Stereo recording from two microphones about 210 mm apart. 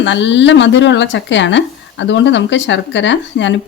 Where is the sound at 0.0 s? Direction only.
60° left (ahead or behind).